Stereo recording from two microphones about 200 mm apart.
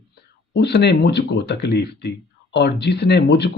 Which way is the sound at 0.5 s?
55° left (ahead or behind).